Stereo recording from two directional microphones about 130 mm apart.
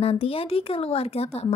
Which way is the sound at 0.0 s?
45° left (ahead or behind).